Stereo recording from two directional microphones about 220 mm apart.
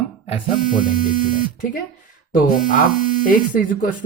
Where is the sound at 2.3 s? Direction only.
40° left (ahead or behind).